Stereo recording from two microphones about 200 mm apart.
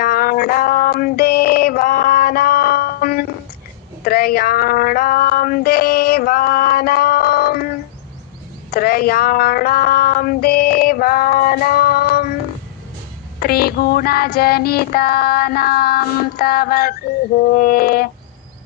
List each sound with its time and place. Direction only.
0.0 s a sound: 50° left (ahead or behind)
4.0 s music: 50° left (ahead or behind)
8.7 s child singing: 50° left (ahead or behind)
13.4 s child singing: 50° left (ahead or behind)